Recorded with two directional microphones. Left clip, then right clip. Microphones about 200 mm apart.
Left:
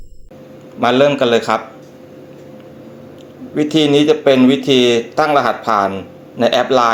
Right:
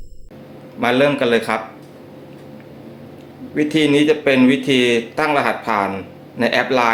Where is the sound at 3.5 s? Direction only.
15° left (ahead or behind).